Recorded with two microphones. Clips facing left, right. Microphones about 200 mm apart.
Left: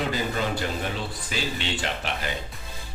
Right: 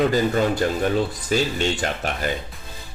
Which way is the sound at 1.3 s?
45° right (ahead or behind).